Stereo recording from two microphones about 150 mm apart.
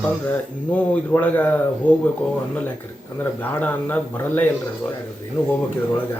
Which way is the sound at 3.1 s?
15° left (ahead or behind).